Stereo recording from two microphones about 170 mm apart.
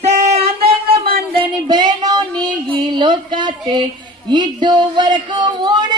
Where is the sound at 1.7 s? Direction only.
25° right (ahead or behind).